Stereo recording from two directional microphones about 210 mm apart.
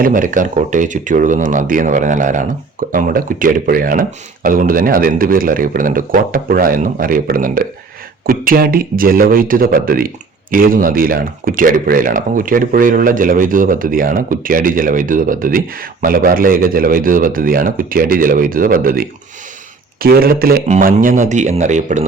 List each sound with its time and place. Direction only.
0.0 s speech: 40° right (ahead or behind)